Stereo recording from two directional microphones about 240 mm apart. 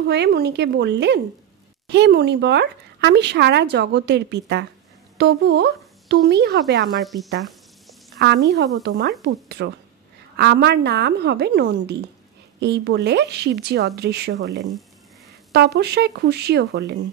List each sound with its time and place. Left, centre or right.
0.1 s speech: right
7.0 s speech: centre
8.2 s speech: right